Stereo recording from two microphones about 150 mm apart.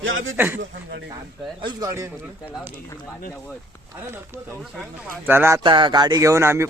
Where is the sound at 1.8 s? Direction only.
20° right (ahead or behind).